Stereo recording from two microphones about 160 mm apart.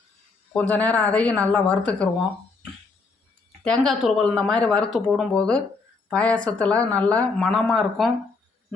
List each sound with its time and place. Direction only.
0.7 s speech: 10° left (ahead or behind)
3.6 s speech: 5° left (ahead or behind)